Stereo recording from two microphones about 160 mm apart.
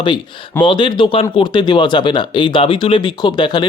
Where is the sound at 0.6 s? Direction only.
30° left (ahead or behind).